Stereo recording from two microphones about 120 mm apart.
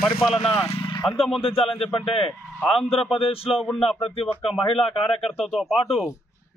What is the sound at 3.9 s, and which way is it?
Speech, 50° left (ahead or behind).